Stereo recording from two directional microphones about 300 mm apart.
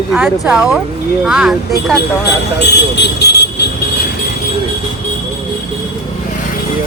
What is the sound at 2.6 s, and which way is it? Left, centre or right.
Speech, left.